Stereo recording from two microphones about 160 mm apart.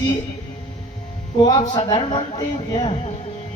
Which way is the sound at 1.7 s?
30° left (ahead or behind).